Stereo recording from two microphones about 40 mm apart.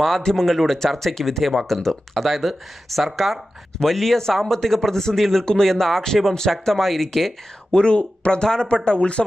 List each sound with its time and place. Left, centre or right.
0.2 s speech: centre
0.5 s speech: centre
7.7 s speech: left